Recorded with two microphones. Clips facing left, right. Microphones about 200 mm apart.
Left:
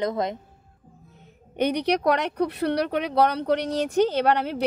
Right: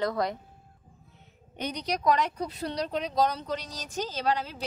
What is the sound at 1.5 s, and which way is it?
Speech, 65° left (ahead or behind).